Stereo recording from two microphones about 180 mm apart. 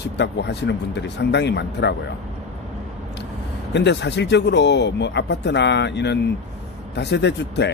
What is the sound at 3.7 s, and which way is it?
A man's voice, 75° left (ahead or behind).